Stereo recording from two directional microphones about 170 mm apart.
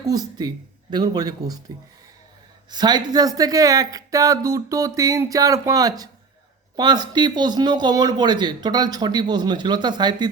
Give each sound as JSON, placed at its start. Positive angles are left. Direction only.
{"t": 0.0, "sound": "speech", "side_deg": -20}
{"t": 2.6, "sound": "speech", "side_deg": -25}